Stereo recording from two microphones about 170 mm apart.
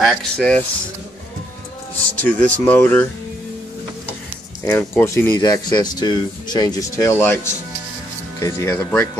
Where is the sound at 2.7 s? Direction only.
10° left (ahead or behind).